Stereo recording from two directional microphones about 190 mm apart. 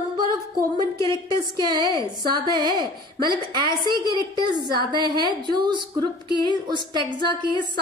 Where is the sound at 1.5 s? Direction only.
25° right (ahead or behind).